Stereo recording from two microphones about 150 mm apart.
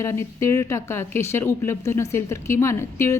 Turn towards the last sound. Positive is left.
turn(degrees=20)  # may be behind; listen again after turning